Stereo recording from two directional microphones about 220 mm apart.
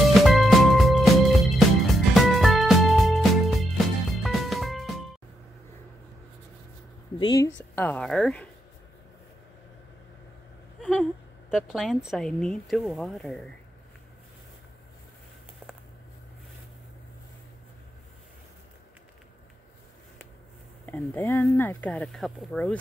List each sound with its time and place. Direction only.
0.1 s music: centre (ahead or behind)
7.2 s a sound: 15° left (ahead or behind)
7.7 s speech: 10° left (ahead or behind)
10.8 s a sound: centre (ahead or behind)
11.5 s speech: centre (ahead or behind)
20.8 s speech: 10° left (ahead or behind)